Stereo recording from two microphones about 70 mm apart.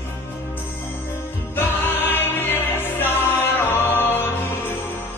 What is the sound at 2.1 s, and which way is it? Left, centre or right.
Music, left.